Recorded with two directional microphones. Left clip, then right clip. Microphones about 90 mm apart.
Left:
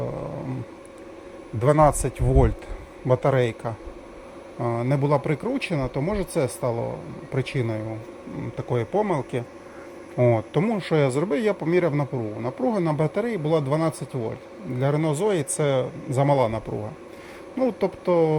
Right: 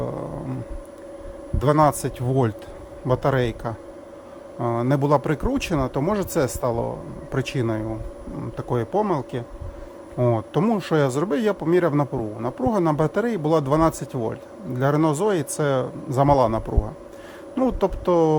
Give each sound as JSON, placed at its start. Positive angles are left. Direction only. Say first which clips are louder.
{"t": 0.0, "sound": "vehicle", "louder": "right 2 dB", "side_deg": -40}
{"t": 1.5, "sound": "a man's voice", "louder": "even", "side_deg": -40}
{"t": 8.5, "sound": "a man's voice", "louder": "right 1 dB", "side_deg": -40}